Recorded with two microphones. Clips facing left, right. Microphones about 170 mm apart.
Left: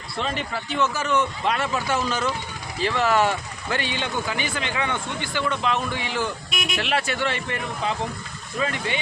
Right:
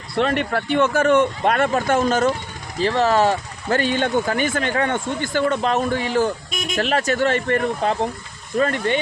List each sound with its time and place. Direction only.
0.2 s speech: 65° right (ahead or behind); by 9.0 s 50° right (ahead or behind)